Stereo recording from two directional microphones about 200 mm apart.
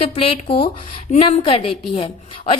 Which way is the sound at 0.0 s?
30° left (ahead or behind).